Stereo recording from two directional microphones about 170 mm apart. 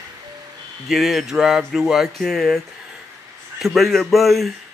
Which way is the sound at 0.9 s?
Centre (ahead or behind).